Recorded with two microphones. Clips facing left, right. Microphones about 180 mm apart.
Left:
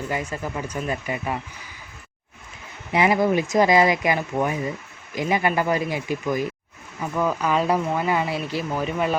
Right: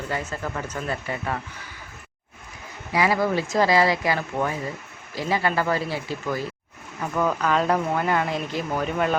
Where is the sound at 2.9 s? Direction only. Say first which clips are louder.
Left 3 dB; 20° left (ahead or behind).